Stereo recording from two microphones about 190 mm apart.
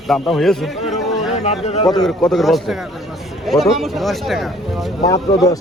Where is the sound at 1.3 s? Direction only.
35° left (ahead or behind).